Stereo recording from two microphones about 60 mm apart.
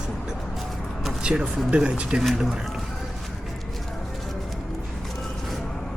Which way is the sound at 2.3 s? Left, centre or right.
Centre.